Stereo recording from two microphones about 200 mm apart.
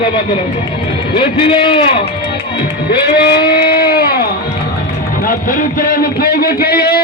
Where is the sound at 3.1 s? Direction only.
50° left (ahead or behind).